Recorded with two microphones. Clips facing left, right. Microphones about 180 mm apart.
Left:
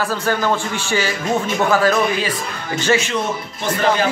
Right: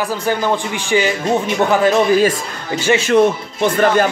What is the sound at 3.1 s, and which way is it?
Speech, 55° right (ahead or behind).